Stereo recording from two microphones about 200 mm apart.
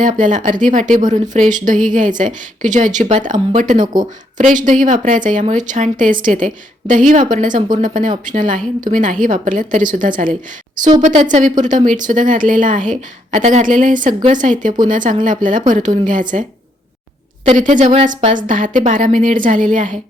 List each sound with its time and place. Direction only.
0.0 s speech: 40° right (ahead or behind)
17.5 s speech: 40° right (ahead or behind)